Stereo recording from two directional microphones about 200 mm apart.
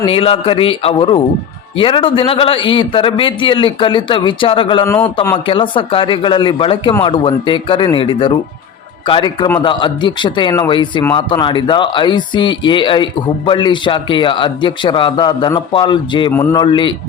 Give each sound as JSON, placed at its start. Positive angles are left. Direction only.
{"t": 0.0, "sound": "speech", "side_deg": 25}
{"t": 4.9, "sound": "a man's voice", "side_deg": 10}
{"t": 5.5, "sound": "speech", "side_deg": 25}